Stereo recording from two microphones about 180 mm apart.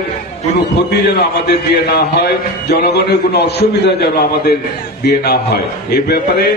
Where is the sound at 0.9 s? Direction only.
60° left (ahead or behind).